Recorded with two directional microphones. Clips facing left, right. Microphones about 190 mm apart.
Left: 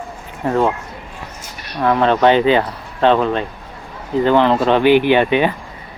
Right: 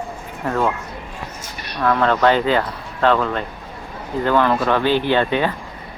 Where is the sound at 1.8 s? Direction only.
20° left (ahead or behind).